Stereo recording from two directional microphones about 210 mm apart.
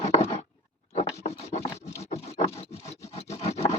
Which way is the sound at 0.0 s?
30° left (ahead or behind).